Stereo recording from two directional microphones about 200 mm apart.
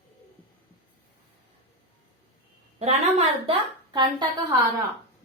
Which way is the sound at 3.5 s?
20° right (ahead or behind).